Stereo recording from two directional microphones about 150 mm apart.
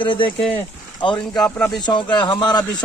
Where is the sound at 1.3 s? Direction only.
10° left (ahead or behind).